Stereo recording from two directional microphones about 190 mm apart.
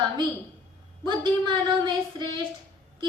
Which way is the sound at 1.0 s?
25° right (ahead or behind).